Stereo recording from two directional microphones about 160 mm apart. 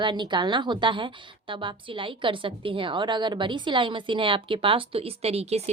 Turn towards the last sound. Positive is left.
turn(degrees=-40)  # may be behind; listen again after turning